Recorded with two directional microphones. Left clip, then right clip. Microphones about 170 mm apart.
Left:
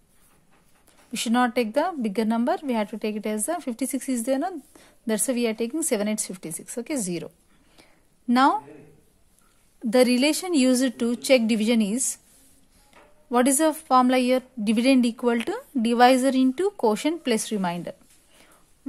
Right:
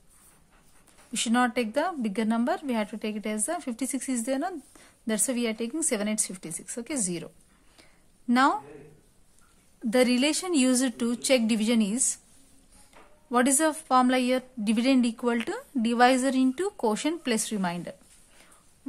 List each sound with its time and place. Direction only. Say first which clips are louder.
1.1 s a woman's voice: left 3 dB; 20° left (ahead or behind)
9.8 s a woman's voice: left 4 dB; 20° left (ahead or behind)
13.3 s a woman's voice: left 3 dB; 20° left (ahead or behind)